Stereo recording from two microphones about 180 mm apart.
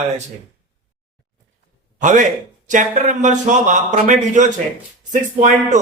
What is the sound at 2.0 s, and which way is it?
A man's voice, 45° right (ahead or behind).